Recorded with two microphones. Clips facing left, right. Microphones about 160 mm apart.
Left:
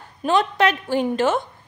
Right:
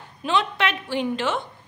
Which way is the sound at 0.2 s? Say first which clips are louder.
Left 5 dB; 45° left (ahead or behind).